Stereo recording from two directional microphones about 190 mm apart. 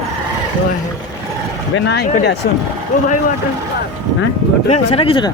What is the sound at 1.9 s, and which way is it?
Speech, 60° left (ahead or behind).